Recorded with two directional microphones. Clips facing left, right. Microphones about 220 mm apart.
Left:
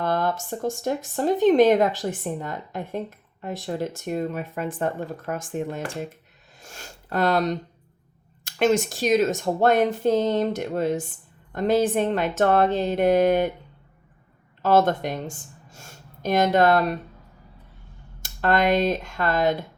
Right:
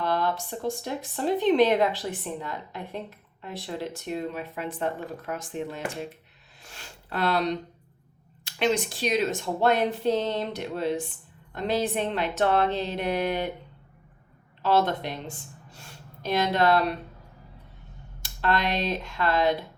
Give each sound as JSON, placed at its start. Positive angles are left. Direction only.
{"t": 0.0, "sound": "speech", "side_deg": 50}
{"t": 14.6, "sound": "speech", "side_deg": 45}
{"t": 18.2, "sound": "speech", "side_deg": 50}